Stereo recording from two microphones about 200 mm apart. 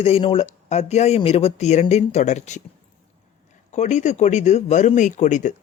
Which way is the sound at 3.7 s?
35° left (ahead or behind).